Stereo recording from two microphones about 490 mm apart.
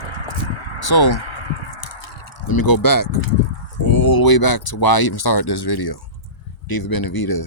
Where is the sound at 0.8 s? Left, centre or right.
Left.